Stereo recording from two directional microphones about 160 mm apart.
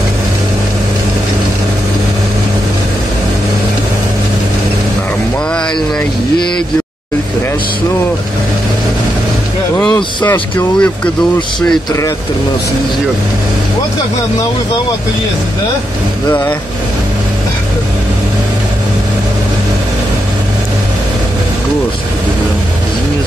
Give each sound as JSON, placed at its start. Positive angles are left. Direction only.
{"t": 10.2, "sound": "a man's voice", "side_deg": 10}
{"t": 16.3, "sound": "a man's voice", "side_deg": 15}